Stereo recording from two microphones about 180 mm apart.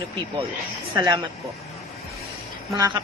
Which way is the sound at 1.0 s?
25° right (ahead or behind).